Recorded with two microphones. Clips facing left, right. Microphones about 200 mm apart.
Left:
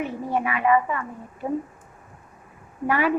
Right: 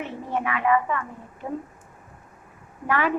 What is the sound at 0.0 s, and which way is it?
Speech, 10° left (ahead or behind).